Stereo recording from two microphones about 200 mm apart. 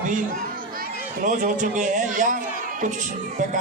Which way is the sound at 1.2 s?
40° right (ahead or behind).